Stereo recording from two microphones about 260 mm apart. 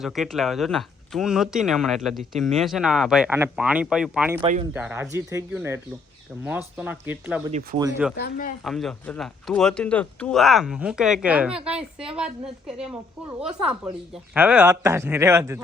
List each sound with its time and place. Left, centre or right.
0.0 s speech: centre
4.4 s speech: right
4.7 s a man's voice: centre
8.1 s speech: left
8.6 s speech: centre
14.1 s a man's voice: centre